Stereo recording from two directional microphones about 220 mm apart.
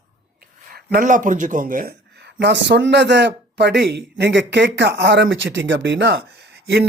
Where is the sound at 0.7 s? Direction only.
40° right (ahead or behind).